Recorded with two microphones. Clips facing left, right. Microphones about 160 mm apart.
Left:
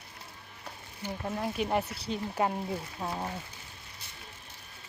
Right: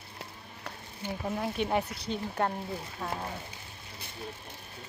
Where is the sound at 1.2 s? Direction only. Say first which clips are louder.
Right 1 dB; centre (ahead or behind).